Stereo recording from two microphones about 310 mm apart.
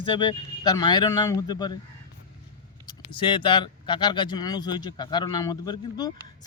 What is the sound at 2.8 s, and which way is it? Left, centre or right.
Speech, centre.